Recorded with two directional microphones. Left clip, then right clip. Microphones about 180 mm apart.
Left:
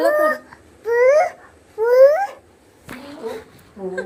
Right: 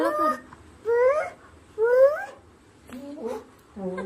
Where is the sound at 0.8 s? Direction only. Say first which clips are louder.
Left 7 dB; 10° right (ahead or behind).